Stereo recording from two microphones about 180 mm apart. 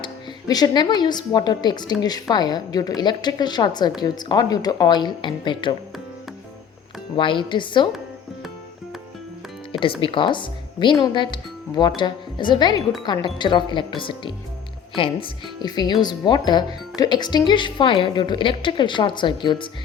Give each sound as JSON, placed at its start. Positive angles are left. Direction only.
{"t": 0.0, "sound": "a woman's voice", "side_deg": 20}
{"t": 7.2, "sound": "speech", "side_deg": 25}
{"t": 9.8, "sound": "speech", "side_deg": 30}